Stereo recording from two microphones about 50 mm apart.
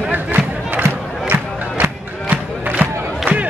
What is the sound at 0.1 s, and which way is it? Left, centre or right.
Music, right.